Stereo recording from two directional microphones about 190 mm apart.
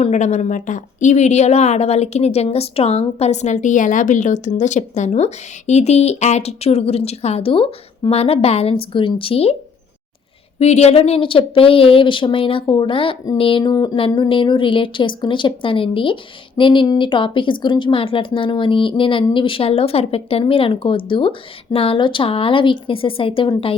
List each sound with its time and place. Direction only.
0.0 s a woman's voice: 40° left (ahead or behind)
10.6 s a woman's voice: 35° left (ahead or behind)